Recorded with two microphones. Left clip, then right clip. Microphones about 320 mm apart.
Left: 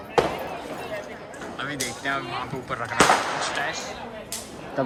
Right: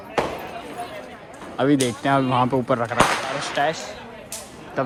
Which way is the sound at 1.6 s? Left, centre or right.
Centre.